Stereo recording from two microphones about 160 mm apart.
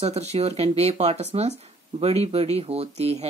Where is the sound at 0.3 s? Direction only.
40° right (ahead or behind).